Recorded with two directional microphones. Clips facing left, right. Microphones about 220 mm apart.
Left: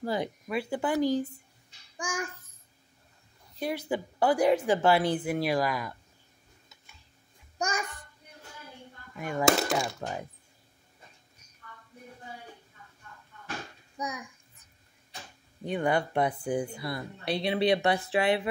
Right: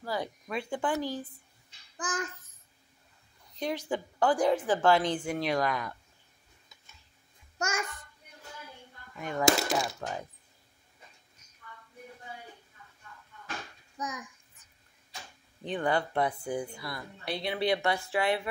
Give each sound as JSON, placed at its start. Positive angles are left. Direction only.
{"t": 0.0, "sound": "speech", "side_deg": 25}
{"t": 0.5, "sound": "speech", "side_deg": 5}
{"t": 3.5, "sound": "a woman's voice", "side_deg": 5}
{"t": 7.5, "sound": "a child's voice", "side_deg": 15}
{"t": 9.2, "sound": "speech", "side_deg": 5}
{"t": 9.9, "sound": "speech", "side_deg": 15}
{"t": 13.9, "sound": "a child's voice", "side_deg": 10}
{"t": 15.6, "sound": "speech", "side_deg": 10}
{"t": 16.7, "sound": "speech", "side_deg": 25}